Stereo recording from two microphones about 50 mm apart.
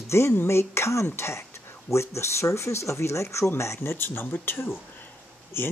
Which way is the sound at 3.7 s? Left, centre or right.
Left.